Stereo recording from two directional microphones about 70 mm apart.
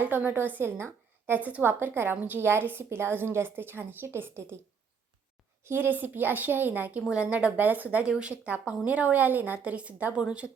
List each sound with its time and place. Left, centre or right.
0.0 s speech: right
0.8 s a sound: right
1.4 s a woman's voice: right
5.6 s speech: right; by 10.5 s centre